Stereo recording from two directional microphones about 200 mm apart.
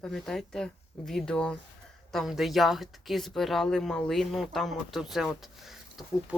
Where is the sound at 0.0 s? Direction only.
Centre (ahead or behind).